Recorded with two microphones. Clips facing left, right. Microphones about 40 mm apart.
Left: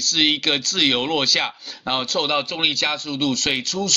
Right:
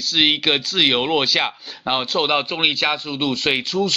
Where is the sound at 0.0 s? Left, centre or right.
Centre.